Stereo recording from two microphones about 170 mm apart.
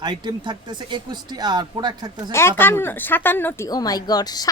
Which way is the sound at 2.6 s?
15° left (ahead or behind).